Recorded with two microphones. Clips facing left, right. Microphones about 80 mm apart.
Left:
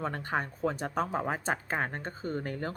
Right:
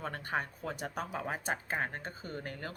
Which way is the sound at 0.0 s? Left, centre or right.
Left.